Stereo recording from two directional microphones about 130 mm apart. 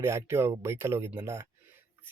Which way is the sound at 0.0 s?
20° right (ahead or behind).